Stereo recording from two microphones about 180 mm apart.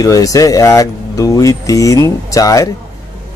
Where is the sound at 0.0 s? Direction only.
20° left (ahead or behind).